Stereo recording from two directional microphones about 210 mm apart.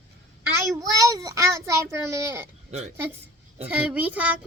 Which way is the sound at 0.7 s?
15° right (ahead or behind).